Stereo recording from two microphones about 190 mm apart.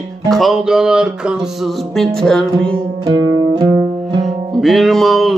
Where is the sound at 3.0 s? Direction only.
20° right (ahead or behind).